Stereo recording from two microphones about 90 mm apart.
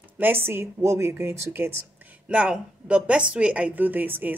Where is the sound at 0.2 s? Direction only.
25° right (ahead or behind).